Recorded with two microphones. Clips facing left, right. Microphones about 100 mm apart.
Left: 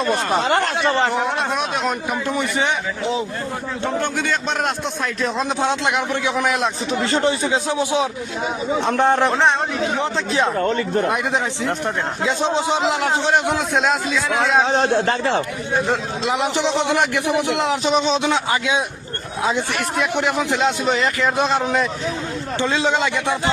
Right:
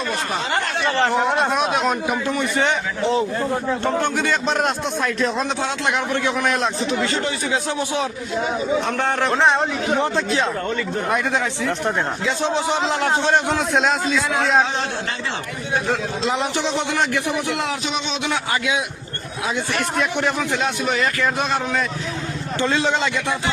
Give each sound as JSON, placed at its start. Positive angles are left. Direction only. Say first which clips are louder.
{"t": 0.4, "sound": "speech", "louder": "left 4 dB", "side_deg": 55}
{"t": 1.0, "sound": "a man's voice", "louder": "right 2 dB", "side_deg": 0}
{"t": 2.3, "sound": "a man's voice", "louder": "left 1 dB", "side_deg": 15}
{"t": 5.5, "sound": "a man's voice", "louder": "left 2 dB", "side_deg": 20}
{"t": 7.0, "sound": "a man's voice", "louder": "left 4 dB", "side_deg": 30}
{"t": 9.3, "sound": "a man's voice", "louder": "even", "side_deg": 0}
{"t": 11.1, "sound": "a man's voice", "louder": "even", "side_deg": 20}
{"t": 13.6, "sound": "a man's voice", "louder": "even", "side_deg": 0}
{"t": 14.7, "sound": "a man's voice", "louder": "left 8 dB", "side_deg": 55}
{"t": 15.9, "sound": "a man's voice", "louder": "left 1 dB", "side_deg": 15}
{"t": 17.8, "sound": "a man's voice", "louder": "left 7 dB", "side_deg": 35}